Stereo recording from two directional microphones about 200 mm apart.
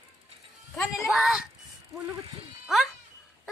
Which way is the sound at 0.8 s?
Centre (ahead or behind).